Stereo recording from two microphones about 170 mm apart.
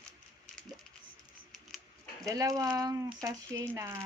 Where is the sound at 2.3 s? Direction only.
20° right (ahead or behind).